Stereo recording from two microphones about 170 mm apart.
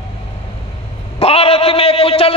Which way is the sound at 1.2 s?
35° left (ahead or behind).